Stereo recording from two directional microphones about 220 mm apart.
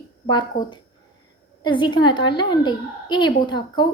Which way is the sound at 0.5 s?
40° left (ahead or behind).